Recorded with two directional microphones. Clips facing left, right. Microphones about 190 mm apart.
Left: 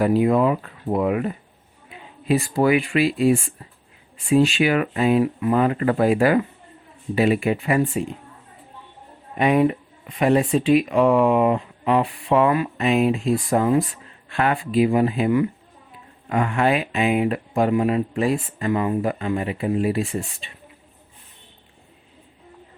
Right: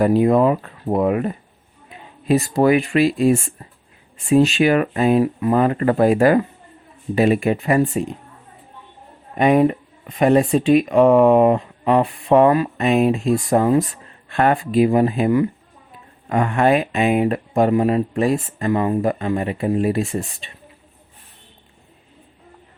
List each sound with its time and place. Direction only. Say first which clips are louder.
0.0 s speech: right 3 dB; 45° right (ahead or behind)
9.4 s speech: right 3 dB; 45° right (ahead or behind)